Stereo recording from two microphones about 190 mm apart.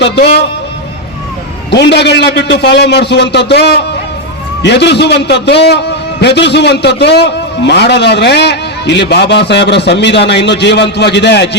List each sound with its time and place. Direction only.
0.0 s a man's voice: 65° left (ahead or behind)
1.7 s a man's voice: 65° left (ahead or behind)